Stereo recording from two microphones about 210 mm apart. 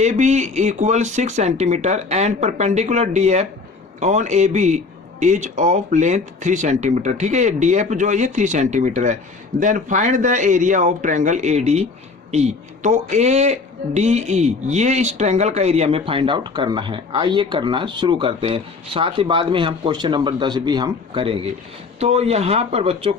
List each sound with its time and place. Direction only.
0.0 s speech: 35° right (ahead or behind)